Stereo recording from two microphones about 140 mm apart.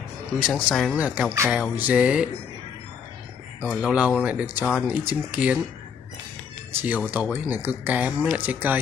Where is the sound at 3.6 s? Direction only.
5° right (ahead or behind).